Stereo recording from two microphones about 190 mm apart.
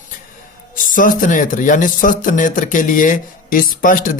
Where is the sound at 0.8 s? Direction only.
45° left (ahead or behind).